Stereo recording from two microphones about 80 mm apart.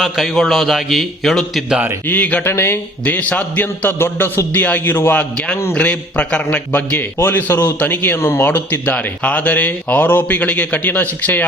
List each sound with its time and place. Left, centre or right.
0.0 s a man's voice: centre
2.0 s speech: centre
2.5 s speech: left
3.0 s speech: centre
5.7 s speech: centre